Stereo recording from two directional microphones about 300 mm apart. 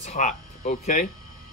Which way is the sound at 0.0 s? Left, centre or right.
Left.